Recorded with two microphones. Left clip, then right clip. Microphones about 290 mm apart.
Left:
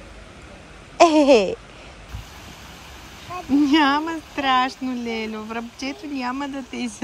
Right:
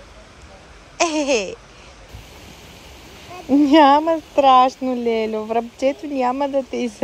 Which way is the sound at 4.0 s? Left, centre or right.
Left.